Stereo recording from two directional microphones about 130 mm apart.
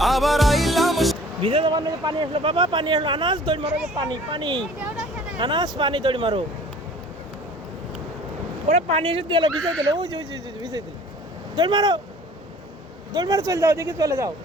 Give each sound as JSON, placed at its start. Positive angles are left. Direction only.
{"t": 0.0, "sound": "music", "side_deg": 0}
{"t": 1.4, "sound": "a man's voice", "side_deg": -40}
{"t": 8.6, "sound": "speech", "side_deg": -55}
{"t": 9.5, "sound": "speech", "side_deg": 5}
{"t": 10.0, "sound": "a man's voice", "side_deg": -35}
{"t": 13.1, "sound": "speech", "side_deg": -30}